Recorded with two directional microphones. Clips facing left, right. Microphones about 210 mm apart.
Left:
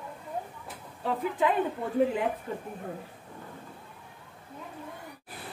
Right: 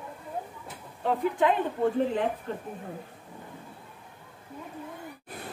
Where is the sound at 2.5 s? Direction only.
10° left (ahead or behind).